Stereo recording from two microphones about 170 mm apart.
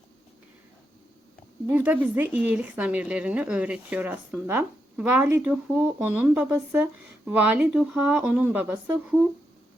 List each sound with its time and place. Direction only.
1.6 s a woman's voice: 10° right (ahead or behind)